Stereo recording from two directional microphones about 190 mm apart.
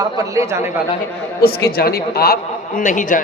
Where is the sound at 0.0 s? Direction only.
15° right (ahead or behind).